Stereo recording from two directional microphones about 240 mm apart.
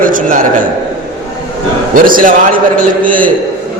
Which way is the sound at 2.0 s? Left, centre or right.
Right.